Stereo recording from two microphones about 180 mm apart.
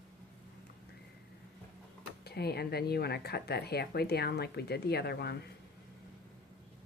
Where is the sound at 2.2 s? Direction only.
60° left (ahead or behind).